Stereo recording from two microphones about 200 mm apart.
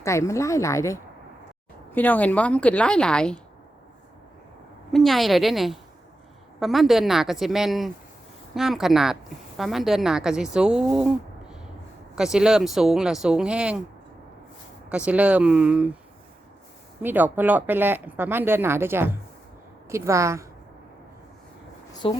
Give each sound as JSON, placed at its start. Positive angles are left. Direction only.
{"t": 0.0, "sound": "a woman's voice", "side_deg": 15}
{"t": 4.9, "sound": "speech", "side_deg": 0}
{"t": 14.8, "sound": "speech", "side_deg": -5}
{"t": 17.0, "sound": "speech", "side_deg": -10}
{"t": 22.0, "sound": "speech", "side_deg": 25}